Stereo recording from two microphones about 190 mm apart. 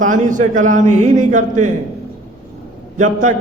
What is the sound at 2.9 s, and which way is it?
Speech, 40° right (ahead or behind).